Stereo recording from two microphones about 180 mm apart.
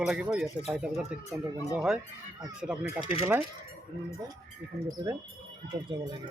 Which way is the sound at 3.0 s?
30° left (ahead or behind).